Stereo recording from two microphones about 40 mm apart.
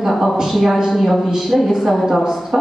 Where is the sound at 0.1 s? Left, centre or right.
Centre.